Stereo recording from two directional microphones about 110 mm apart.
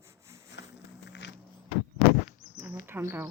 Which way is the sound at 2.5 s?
20° right (ahead or behind).